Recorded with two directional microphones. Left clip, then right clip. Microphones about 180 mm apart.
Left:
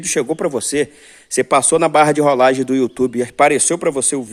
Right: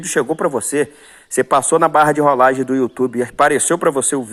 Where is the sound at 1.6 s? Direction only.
20° left (ahead or behind).